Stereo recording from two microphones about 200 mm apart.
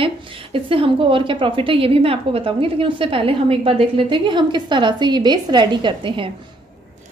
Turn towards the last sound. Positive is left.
turn(degrees=-25)  # may be behind; listen again after turning